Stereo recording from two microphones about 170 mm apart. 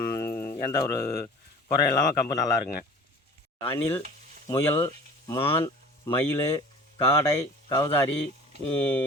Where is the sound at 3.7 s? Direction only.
20° left (ahead or behind).